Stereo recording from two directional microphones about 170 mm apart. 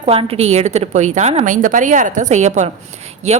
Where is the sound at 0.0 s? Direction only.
35° right (ahead or behind).